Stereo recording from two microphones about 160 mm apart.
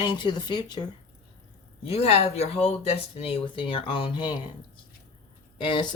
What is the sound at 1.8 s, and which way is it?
Speech, 40° left (ahead or behind).